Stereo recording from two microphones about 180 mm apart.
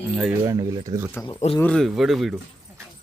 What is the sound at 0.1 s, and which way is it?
Speech, centre (ahead or behind).